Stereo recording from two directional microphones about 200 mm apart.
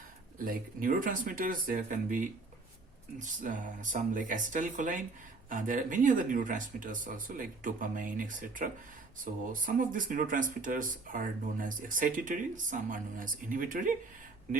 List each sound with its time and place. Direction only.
0.3 s speech: 45° right (ahead or behind)